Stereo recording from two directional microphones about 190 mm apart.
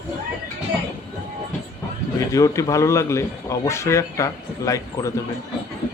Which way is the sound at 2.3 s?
15° left (ahead or behind).